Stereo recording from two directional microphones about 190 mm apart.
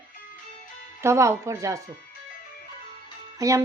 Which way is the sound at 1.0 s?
15° right (ahead or behind).